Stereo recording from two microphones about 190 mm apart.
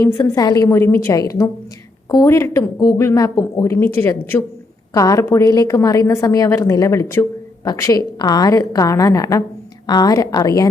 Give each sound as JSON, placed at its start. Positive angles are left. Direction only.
{"t": 0.0, "sound": "a woman's voice", "side_deg": 20}